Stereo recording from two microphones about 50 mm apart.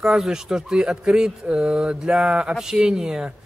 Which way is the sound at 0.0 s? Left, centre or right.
Centre.